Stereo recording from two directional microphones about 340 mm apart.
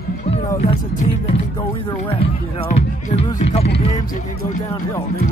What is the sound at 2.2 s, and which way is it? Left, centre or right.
Speech, left.